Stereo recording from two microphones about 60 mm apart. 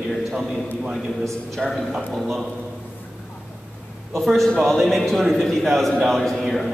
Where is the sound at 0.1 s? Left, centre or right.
Centre.